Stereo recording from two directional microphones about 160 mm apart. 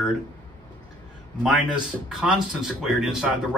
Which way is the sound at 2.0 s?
5° right (ahead or behind).